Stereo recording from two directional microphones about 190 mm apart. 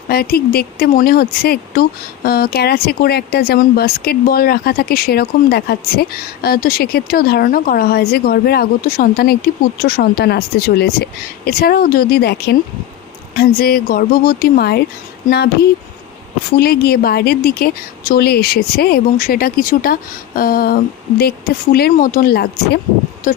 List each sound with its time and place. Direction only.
0.1 s a woman's voice: 55° left (ahead or behind)
16.6 s speech: 55° left (ahead or behind)